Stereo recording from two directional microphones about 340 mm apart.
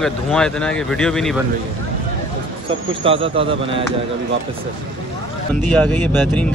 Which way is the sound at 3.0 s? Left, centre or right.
Centre.